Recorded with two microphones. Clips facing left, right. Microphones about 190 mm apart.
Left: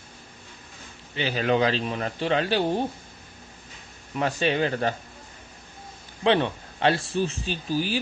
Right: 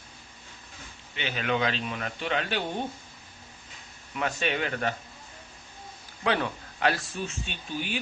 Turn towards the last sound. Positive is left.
turn(degrees=35)  # may be behind; listen again after turning